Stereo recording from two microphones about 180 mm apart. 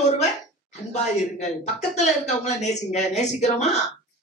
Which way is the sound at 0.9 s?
40° left (ahead or behind).